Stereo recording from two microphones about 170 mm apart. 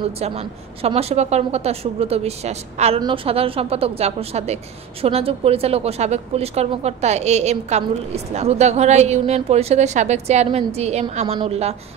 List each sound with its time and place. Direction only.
0.2 s speech: 40° right (ahead or behind)